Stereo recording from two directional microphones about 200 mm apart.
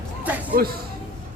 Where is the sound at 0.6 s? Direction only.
50° right (ahead or behind).